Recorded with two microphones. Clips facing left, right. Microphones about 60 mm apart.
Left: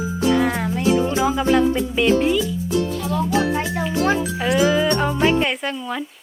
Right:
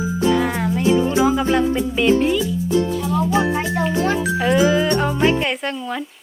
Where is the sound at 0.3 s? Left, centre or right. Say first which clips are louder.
Even; centre.